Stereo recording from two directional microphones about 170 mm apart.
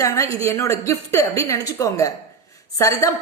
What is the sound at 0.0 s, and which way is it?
A woman's voice, 20° left (ahead or behind).